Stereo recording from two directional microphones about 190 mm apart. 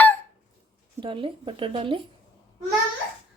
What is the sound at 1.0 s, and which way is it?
Speech, 25° right (ahead or behind).